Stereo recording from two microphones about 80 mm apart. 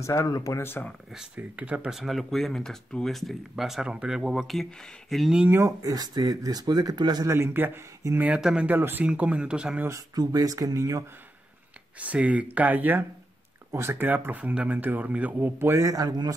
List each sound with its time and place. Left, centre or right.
0.0 s speech: left
0.6 s speech: left
1.1 s speech: centre
5.5 s speech: right
5.8 s speech: right
7.2 s speech: right
8.4 s speech: centre
8.6 s speech: right
9.8 s speech: right
12.0 s speech: centre
13.7 s speech: right
15.6 s speech: right